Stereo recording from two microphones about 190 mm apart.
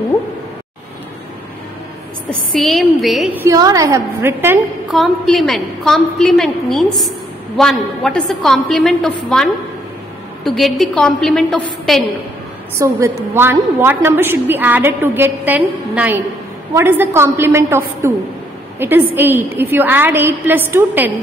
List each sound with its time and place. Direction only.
2.5 s a woman's voice: centre (ahead or behind)
4.8 s a woman's voice: centre (ahead or behind)
12.7 s a woman's voice: 15° right (ahead or behind)